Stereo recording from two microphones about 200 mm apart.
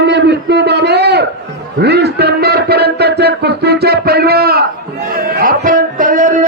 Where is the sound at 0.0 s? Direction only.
60° right (ahead or behind).